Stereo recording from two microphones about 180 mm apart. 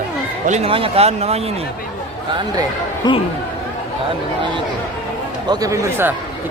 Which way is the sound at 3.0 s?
25° left (ahead or behind).